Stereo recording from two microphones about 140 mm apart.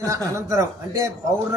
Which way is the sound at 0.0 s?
20° right (ahead or behind).